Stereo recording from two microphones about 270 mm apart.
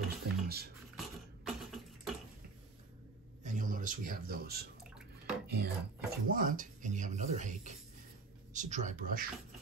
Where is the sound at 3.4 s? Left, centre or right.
Right.